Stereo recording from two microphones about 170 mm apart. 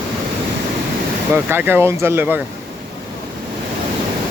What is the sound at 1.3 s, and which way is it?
Speech, 10° right (ahead or behind).